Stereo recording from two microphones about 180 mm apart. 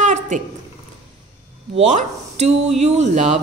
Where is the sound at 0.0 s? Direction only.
40° right (ahead or behind).